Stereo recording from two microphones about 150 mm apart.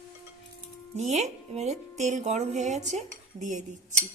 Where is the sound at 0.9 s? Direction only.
50° right (ahead or behind).